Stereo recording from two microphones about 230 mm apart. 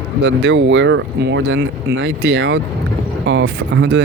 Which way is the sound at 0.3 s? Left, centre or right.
Right.